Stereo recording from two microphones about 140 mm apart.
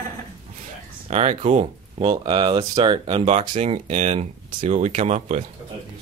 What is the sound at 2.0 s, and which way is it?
Speech, 35° right (ahead or behind).